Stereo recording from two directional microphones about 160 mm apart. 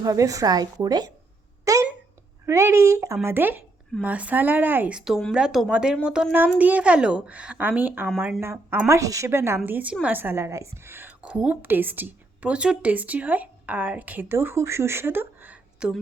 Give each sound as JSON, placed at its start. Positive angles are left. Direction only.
{"t": 0.0, "sound": "a woman's voice", "side_deg": -20}
{"t": 1.7, "sound": "a sound", "side_deg": -20}
{"t": 2.5, "sound": "a woman's voice", "side_deg": -15}